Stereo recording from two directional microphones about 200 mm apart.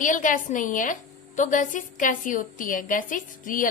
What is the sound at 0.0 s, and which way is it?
A woman's voice, 40° left (ahead or behind).